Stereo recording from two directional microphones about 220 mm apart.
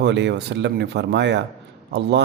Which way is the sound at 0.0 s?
50° right (ahead or behind).